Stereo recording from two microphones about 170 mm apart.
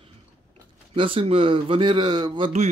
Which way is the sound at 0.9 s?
30° right (ahead or behind).